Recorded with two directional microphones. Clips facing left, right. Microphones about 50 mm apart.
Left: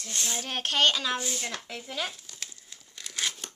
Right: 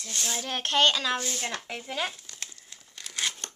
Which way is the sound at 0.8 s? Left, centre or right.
Centre.